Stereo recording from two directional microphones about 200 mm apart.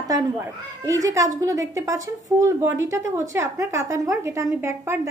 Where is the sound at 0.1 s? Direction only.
15° right (ahead or behind).